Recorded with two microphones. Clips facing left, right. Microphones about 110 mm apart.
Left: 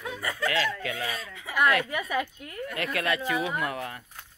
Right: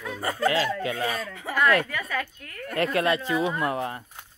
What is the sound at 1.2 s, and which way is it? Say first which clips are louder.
Speech: right 6 dB; 50° right (ahead or behind).